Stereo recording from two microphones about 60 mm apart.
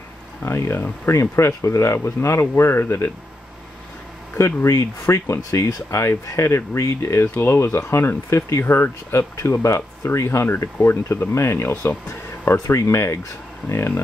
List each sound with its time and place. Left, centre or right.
0.4 s speech: left
4.4 s speech: left